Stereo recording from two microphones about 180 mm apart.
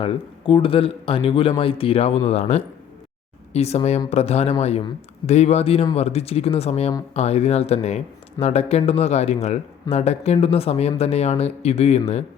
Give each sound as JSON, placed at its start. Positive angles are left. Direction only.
{"t": 0.0, "sound": "a man's voice", "side_deg": 30}